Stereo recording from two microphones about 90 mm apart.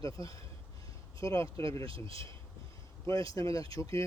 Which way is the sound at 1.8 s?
85° right.